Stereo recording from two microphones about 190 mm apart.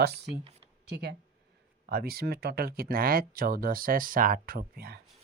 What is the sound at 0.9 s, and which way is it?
Speech, 65° right (ahead or behind).